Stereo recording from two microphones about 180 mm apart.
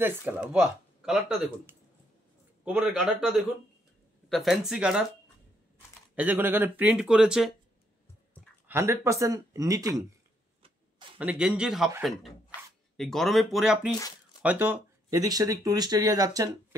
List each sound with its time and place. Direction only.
0.0 s speech: 10° right (ahead or behind)
2.6 s speech: 10° right (ahead or behind)
6.1 s speech: 10° right (ahead or behind)
8.6 s speech: 15° right (ahead or behind)
11.1 s speech: 5° right (ahead or behind)
12.9 s speech: centre (ahead or behind); by 16.4 s 20° right (ahead or behind)